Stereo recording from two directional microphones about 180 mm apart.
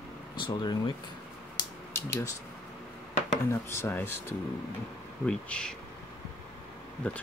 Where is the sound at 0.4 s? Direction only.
25° left (ahead or behind).